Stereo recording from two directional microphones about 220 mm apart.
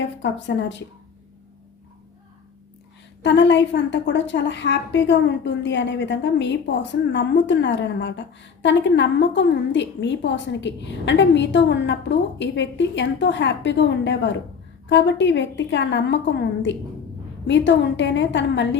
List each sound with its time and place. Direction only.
0.2 s a woman's voice: 55° left (ahead or behind)
3.2 s a woman's voice: 55° left (ahead or behind)